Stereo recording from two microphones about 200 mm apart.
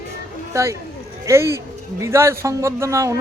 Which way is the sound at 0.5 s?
15° right (ahead or behind).